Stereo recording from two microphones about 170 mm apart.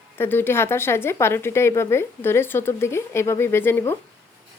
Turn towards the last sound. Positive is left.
turn(degrees=15)  # may be behind; listen again after turning